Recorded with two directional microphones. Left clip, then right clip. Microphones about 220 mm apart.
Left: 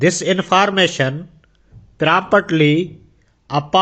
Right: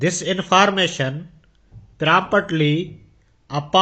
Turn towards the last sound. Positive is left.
turn(degrees=20)  # may be behind; listen again after turning